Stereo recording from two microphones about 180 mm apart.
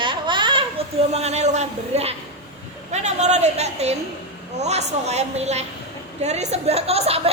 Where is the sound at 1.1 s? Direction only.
35° right (ahead or behind).